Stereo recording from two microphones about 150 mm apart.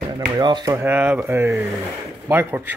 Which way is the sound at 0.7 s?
15° right (ahead or behind).